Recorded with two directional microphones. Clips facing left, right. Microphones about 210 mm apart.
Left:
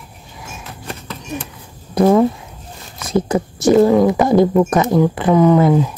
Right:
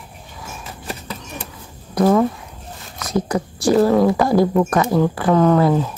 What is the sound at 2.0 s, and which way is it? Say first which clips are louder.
Speech: left 3 dB; 25° left (ahead or behind).